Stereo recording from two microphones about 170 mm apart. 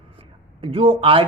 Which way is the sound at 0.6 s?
35° right (ahead or behind).